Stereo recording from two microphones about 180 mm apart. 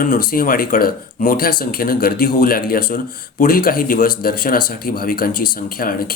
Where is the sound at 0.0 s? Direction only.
50° left (ahead or behind).